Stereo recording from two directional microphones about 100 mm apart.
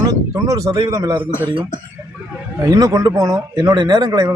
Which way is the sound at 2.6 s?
35° right (ahead or behind).